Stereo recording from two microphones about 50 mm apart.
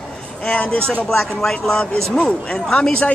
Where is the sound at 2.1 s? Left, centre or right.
Centre.